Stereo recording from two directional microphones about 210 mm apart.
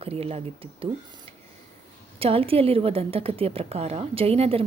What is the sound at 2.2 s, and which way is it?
A woman's voice, 25° right (ahead or behind).